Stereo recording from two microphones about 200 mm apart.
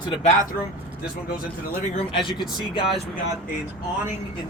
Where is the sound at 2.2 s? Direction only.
25° left (ahead or behind).